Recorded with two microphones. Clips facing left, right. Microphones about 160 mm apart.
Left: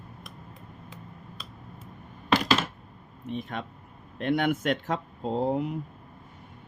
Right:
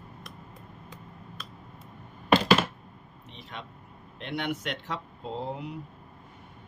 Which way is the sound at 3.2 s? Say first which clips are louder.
Left 10 dB; 50° left (ahead or behind).